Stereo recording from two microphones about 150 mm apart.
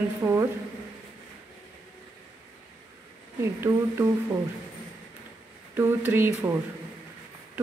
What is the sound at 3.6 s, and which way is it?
Speech, 15° right (ahead or behind).